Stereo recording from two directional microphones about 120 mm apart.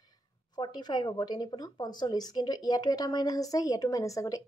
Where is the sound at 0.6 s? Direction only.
35° left (ahead or behind).